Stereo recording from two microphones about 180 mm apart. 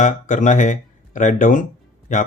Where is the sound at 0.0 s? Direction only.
45° left (ahead or behind).